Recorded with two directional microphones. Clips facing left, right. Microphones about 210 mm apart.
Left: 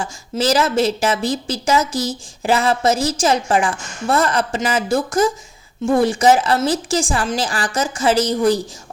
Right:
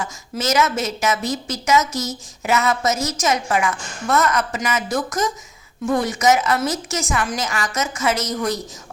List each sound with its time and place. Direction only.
0.0 s a woman's voice: 30° left (ahead or behind)